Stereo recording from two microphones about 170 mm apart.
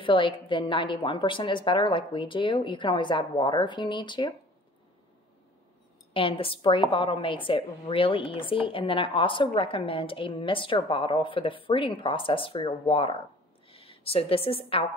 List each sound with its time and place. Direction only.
0.0 s speech: 30° left (ahead or behind)
6.1 s a woman's voice: 30° left (ahead or behind)